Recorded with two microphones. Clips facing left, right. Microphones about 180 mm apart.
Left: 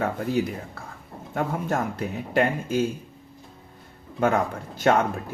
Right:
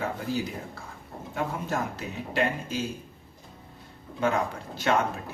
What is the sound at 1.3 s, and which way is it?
Speech, 50° left (ahead or behind).